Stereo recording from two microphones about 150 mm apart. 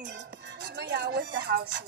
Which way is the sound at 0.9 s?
90° right.